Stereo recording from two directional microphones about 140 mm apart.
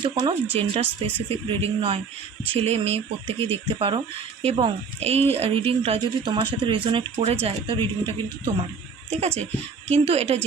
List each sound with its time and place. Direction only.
0.0 s speech: 35° right (ahead or behind)
9.2 s speech: 50° right (ahead or behind)